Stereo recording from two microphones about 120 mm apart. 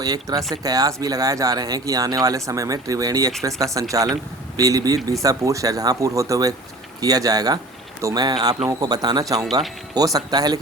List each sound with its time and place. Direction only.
0.0 s speech: 30° right (ahead or behind)